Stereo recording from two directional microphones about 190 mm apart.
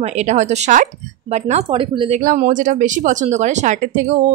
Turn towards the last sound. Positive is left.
turn(degrees=-40)  # may be behind; listen again after turning